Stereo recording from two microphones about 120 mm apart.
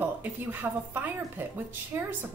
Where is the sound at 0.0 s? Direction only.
15° right (ahead or behind).